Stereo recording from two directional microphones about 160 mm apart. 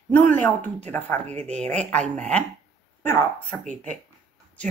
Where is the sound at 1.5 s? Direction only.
45° right (ahead or behind).